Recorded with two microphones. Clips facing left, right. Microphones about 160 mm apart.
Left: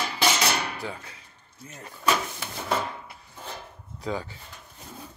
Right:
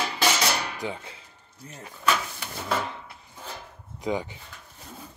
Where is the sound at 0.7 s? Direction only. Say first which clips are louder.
Right 3 dB; 20° right (ahead or behind).